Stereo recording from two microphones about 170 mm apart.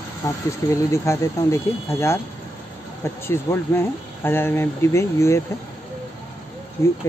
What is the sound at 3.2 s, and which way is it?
Speech, 15° left (ahead or behind).